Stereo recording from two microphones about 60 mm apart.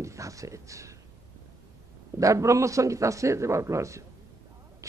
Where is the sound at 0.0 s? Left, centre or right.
Right.